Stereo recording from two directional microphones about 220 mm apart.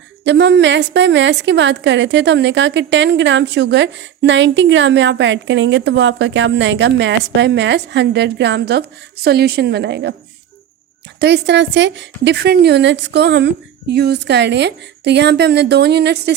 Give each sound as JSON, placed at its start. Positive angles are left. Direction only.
{"t": 0.3, "sound": "a woman's voice", "side_deg": -50}
{"t": 11.2, "sound": "a woman's voice", "side_deg": -50}